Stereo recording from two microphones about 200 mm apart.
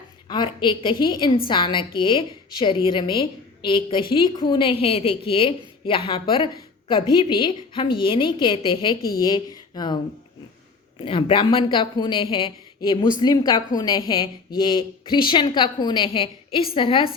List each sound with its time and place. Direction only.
0.3 s a woman's voice: 25° left (ahead or behind)
11.0 s a woman's voice: 25° left (ahead or behind)